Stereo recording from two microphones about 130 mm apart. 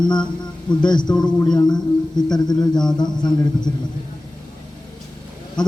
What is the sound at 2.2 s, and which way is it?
A man's voice, 30° left (ahead or behind).